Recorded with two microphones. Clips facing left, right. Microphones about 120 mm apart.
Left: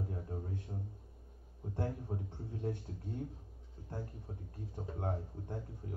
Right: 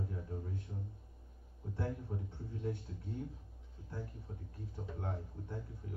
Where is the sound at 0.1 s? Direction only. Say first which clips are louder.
Left 1 dB; 40° left (ahead or behind).